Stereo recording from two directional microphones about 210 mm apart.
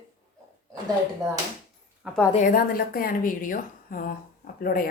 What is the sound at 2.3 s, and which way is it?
A woman's voice, 40° left (ahead or behind).